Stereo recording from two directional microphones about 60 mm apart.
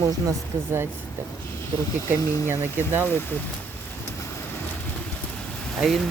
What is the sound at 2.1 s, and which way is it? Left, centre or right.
Speech, left.